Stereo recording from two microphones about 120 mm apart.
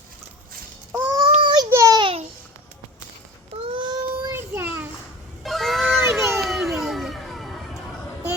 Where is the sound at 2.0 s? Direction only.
45° right (ahead or behind).